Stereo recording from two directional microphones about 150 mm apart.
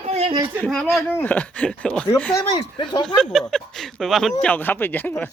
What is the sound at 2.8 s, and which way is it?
Speech, 30° left (ahead or behind).